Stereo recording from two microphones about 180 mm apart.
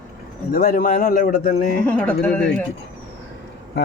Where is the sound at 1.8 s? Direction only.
5° left (ahead or behind).